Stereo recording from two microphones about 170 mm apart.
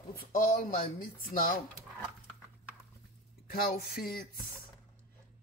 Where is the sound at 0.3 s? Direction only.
55° left (ahead or behind).